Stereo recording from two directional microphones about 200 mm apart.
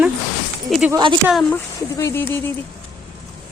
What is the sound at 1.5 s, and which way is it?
Speech, 15° left (ahead or behind).